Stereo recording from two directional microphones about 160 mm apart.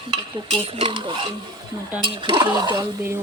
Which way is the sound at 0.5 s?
35° right (ahead or behind).